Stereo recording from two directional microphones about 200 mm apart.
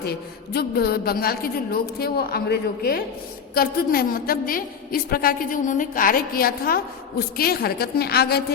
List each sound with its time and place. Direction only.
0.0 s a woman's voice: 50° left (ahead or behind)